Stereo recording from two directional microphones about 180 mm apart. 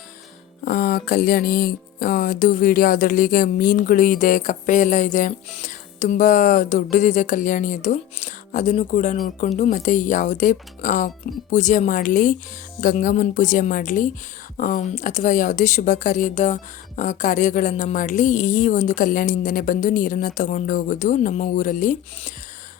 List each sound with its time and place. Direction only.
0.6 s speech: 55° left (ahead or behind)